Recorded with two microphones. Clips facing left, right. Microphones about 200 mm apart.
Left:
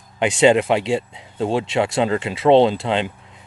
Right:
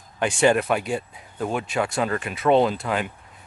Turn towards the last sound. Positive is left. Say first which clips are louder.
# left 5 dB
turn(degrees=25)  # may be behind; listen again after turning